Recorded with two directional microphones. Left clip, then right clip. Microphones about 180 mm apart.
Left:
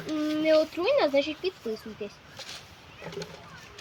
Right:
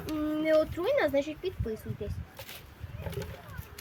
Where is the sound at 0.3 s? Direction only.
15° left (ahead or behind).